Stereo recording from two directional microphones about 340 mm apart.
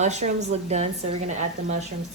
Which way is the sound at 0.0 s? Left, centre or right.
Centre.